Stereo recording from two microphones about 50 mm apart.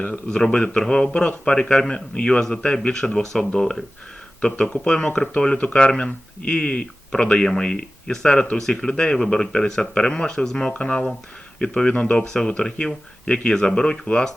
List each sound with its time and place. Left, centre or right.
0.0 s speech: left
4.4 s speech: left